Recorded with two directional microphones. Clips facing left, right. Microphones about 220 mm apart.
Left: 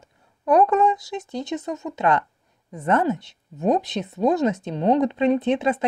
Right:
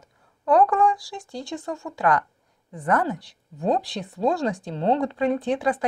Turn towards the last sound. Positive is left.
turn(degrees=20)  # may be behind; listen again after turning